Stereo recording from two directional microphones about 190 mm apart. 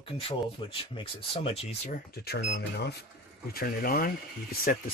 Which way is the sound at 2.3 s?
55° left (ahead or behind).